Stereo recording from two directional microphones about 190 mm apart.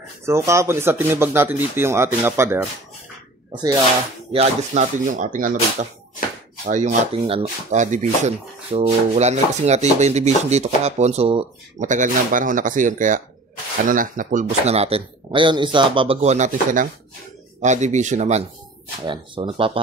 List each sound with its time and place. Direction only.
0.5 s speech: 15° right (ahead or behind)
4.3 s speech: 35° right (ahead or behind)
11.9 s speech: 45° right (ahead or behind)
19.0 s speech: 25° right (ahead or behind)